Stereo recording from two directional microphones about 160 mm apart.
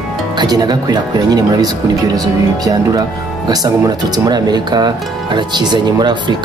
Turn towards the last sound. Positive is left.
turn(degrees=-30)  # may be behind; listen again after turning